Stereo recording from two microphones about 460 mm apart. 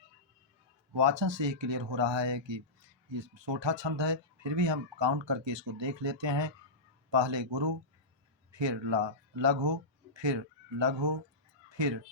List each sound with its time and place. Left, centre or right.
0.9 s speech: right